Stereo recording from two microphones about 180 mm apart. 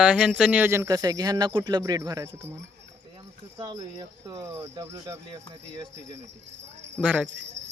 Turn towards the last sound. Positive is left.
turn(degrees=-90)